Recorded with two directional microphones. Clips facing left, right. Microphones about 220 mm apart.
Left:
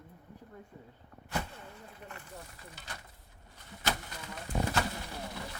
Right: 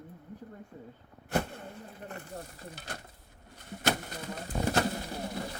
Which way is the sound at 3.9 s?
45° right (ahead or behind).